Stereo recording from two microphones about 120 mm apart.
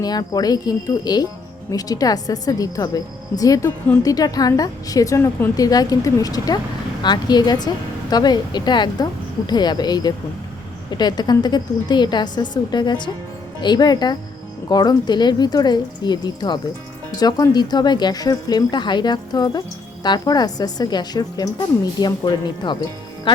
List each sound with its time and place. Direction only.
0.0 s speech: 35° left (ahead or behind)